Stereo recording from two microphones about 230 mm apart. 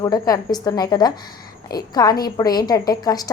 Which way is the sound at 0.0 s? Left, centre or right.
Centre.